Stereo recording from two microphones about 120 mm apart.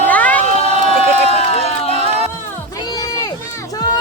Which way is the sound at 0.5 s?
70° right (ahead or behind).